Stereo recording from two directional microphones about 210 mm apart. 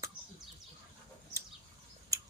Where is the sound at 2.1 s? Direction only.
15° right (ahead or behind).